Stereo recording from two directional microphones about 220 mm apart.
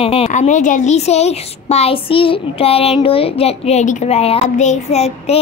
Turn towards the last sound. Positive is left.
turn(degrees=30)  # may be behind; listen again after turning